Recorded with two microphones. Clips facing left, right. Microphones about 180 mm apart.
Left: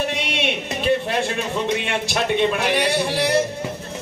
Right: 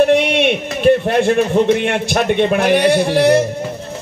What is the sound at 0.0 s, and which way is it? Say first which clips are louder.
A man's voice: right 12 dB; 55° right (ahead or behind).